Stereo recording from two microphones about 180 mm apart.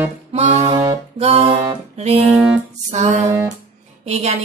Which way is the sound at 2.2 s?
5° right (ahead or behind).